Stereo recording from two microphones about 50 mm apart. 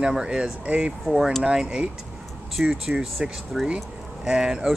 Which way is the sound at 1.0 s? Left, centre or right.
Centre.